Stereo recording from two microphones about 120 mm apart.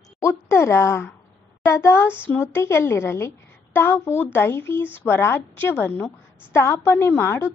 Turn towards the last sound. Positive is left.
turn(degrees=20)  # may be behind; listen again after turning